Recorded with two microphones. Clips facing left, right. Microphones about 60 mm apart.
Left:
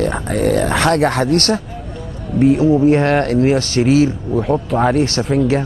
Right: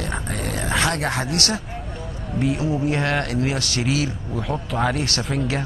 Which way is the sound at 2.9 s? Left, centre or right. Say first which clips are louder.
Left 9 dB; left.